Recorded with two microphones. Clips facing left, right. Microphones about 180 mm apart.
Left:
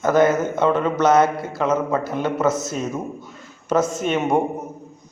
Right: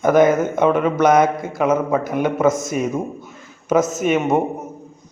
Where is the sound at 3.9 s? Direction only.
5° right (ahead or behind).